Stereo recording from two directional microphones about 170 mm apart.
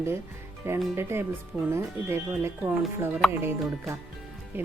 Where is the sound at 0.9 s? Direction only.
15° right (ahead or behind).